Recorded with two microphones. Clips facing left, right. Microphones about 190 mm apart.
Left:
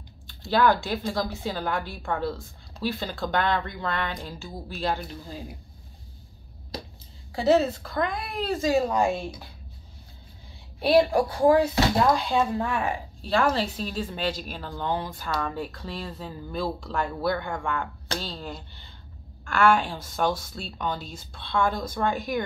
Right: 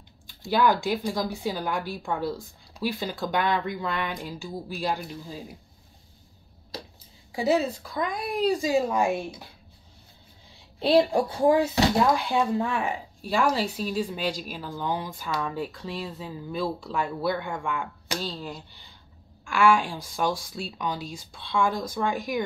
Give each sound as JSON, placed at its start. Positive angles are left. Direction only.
{"t": 0.4, "sound": "speech", "side_deg": -15}
{"t": 7.3, "sound": "speech", "side_deg": -10}
{"t": 10.8, "sound": "a woman's voice", "side_deg": -25}